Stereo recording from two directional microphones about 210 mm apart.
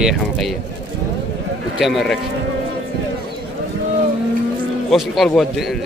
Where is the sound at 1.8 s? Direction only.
Centre (ahead or behind).